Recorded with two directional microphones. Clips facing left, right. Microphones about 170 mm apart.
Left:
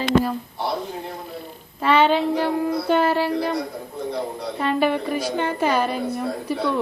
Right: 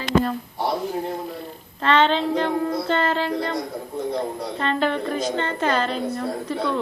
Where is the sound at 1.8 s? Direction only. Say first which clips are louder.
Left 1 dB; 10° left (ahead or behind).